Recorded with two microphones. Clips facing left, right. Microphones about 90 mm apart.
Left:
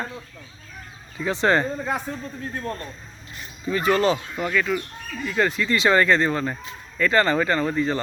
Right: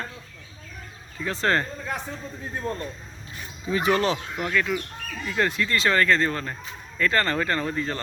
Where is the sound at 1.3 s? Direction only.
5° left (ahead or behind).